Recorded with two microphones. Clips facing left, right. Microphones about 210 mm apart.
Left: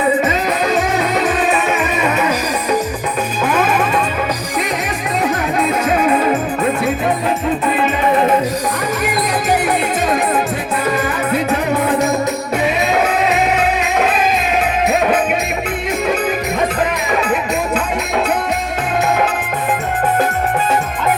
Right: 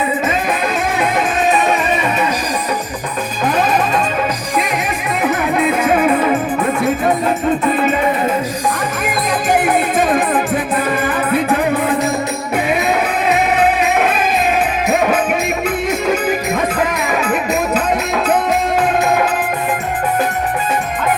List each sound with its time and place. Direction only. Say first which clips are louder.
0.9 s music: left 1 dB; 50° right (ahead or behind)
5.8 s music: right 2 dB; 55° right (ahead or behind)
9.5 s music: right 3 dB; 50° right (ahead or behind)
11.4 s music: right 1 dB; 55° right (ahead or behind)